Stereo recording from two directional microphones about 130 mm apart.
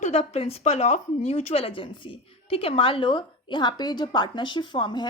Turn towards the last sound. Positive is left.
turn(degrees=35)  # may be behind; listen again after turning